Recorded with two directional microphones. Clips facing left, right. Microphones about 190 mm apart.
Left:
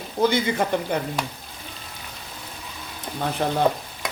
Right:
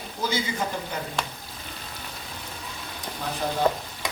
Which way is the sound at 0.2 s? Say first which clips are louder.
Left 7 dB; 60° left (ahead or behind).